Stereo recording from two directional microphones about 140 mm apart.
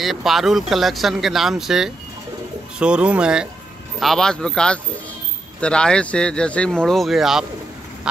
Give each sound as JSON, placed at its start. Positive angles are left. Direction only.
{"t": 0.0, "sound": "speech", "side_deg": 0}